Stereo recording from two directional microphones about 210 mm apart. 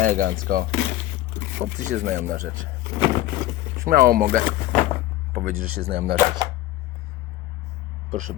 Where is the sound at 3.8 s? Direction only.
45° right (ahead or behind).